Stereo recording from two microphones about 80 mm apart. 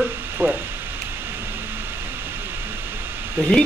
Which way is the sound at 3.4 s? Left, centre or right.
Right.